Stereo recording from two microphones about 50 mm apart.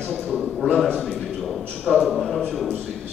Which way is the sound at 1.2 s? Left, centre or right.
Centre.